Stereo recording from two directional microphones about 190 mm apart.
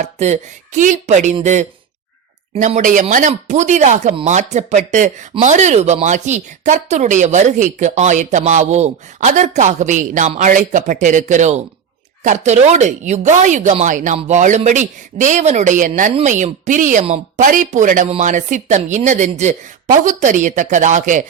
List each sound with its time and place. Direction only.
0.0 s speech: 35° right (ahead or behind)